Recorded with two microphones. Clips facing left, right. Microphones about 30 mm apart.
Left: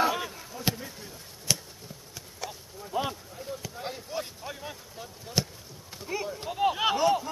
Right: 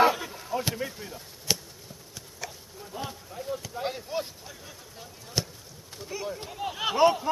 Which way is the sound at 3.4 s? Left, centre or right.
Centre.